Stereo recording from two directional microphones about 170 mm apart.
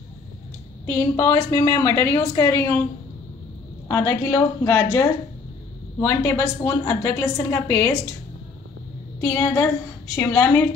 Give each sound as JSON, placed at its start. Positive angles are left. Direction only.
{"t": 0.8, "sound": "a woman's voice", "side_deg": 15}
{"t": 3.9, "sound": "a woman's voice", "side_deg": 20}
{"t": 9.2, "sound": "a woman's voice", "side_deg": 20}